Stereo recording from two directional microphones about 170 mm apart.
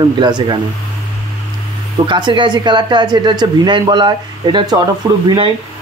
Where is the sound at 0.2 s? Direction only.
25° right (ahead or behind).